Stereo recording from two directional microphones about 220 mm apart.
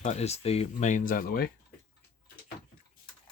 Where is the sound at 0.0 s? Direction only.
30° left (ahead or behind).